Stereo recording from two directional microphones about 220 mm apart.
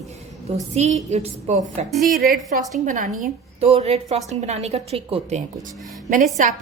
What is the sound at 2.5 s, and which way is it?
A woman's voice, 40° right (ahead or behind).